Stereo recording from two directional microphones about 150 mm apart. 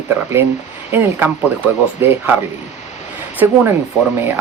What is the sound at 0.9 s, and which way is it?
Speech, 15° right (ahead or behind).